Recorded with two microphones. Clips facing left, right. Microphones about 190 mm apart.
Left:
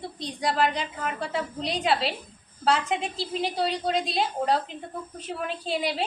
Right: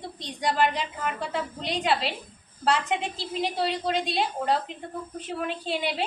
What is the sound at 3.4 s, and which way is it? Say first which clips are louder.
A woman's voice: even; centre (ahead or behind).